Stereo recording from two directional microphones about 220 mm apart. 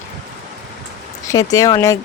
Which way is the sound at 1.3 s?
15° left (ahead or behind).